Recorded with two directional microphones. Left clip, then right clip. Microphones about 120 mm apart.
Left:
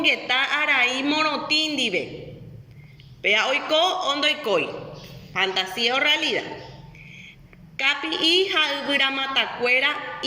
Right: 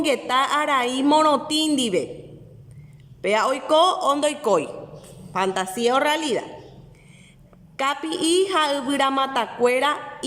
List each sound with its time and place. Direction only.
0.0 s a woman's voice: 35° right (ahead or behind)
3.2 s a woman's voice: 35° right (ahead or behind)
8.0 s a woman's voice: 40° right (ahead or behind)